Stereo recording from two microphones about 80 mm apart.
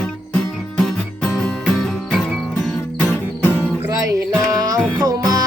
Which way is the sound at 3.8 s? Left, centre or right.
Right.